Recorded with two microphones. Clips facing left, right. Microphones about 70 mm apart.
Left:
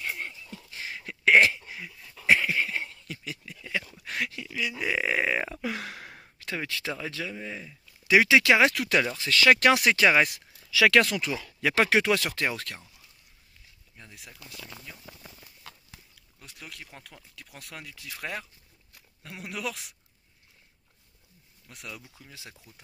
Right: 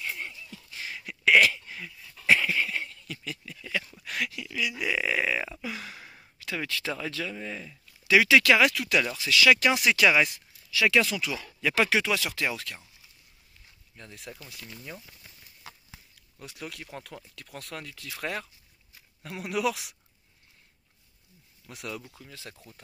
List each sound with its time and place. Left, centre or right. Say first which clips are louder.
0.0 s a sound: left 1 dB; left
5.6 s a sound: left 4 dB; left
6.2 s a sound: even; left
6.6 s speech: right 2 dB; left
8.0 s speech: even; left
9.1 s speech: right 1 dB; left
10.9 s speech: left 1 dB; left
13.9 s speech: right 5 dB; centre
15.7 s horse: right 1 dB; centre
16.3 s speech: right 5 dB; centre
21.6 s speech: right 5 dB; centre
22.2 s speech: right 3 dB; centre